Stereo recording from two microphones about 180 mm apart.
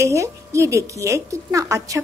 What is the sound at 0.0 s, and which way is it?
A woman's voice, 15° right (ahead or behind).